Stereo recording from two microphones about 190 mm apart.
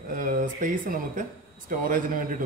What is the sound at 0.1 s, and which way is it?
A man's voice, 45° right (ahead or behind).